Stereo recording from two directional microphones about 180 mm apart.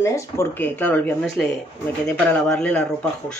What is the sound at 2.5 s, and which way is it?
Speech, 5° left (ahead or behind).